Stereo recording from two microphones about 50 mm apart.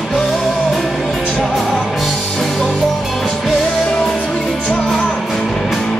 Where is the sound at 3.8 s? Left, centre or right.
Centre.